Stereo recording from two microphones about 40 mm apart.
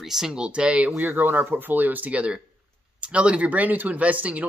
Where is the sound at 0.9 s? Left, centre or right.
Right.